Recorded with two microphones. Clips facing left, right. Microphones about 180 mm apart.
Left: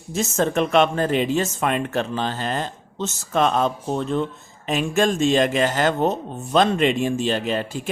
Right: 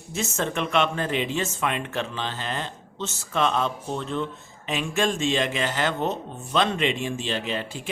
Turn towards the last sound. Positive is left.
turn(degrees=45)  # may be behind; listen again after turning